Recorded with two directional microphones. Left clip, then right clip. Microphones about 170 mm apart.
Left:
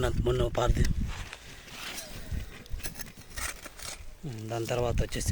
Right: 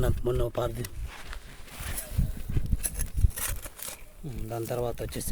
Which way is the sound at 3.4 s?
45° right (ahead or behind).